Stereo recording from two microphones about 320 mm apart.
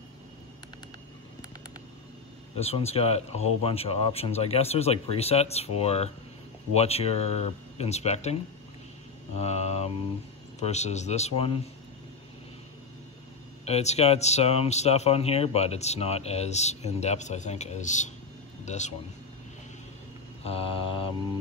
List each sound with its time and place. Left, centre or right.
2.5 s speech: centre
13.7 s speech: centre
20.4 s mantra: centre